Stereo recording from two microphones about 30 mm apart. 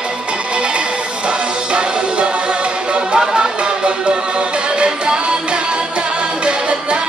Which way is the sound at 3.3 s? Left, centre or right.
Right.